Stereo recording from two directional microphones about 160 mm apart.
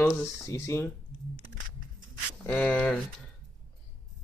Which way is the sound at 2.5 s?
10° left (ahead or behind).